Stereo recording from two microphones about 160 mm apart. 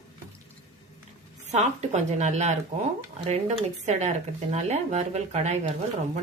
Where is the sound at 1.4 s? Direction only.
45° right (ahead or behind).